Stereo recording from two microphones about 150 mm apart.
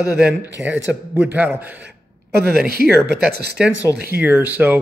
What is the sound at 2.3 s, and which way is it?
Speech, 90° right.